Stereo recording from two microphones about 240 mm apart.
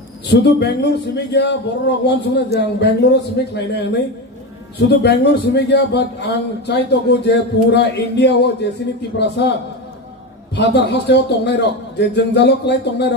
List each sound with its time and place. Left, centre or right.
0.3 s a man's voice: left
10.5 s a man's voice: left